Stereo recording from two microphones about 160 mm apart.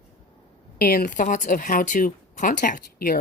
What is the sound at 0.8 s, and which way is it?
Speech, 65° left (ahead or behind).